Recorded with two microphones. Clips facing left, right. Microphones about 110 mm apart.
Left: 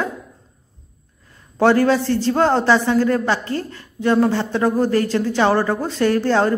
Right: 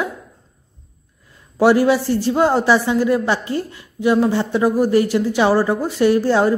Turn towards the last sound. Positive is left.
turn(degrees=-10)  # may be behind; listen again after turning